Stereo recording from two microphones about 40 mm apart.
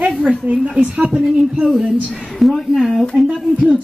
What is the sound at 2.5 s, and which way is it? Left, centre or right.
Speech, centre.